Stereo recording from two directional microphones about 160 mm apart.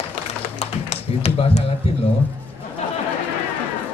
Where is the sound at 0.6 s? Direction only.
40° left (ahead or behind).